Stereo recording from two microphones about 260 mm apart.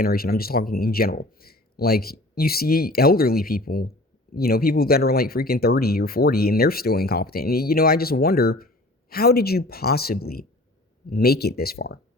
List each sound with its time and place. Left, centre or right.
0.0 s speech: left